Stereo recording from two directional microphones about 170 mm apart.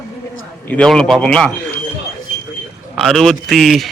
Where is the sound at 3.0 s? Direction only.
Centre (ahead or behind).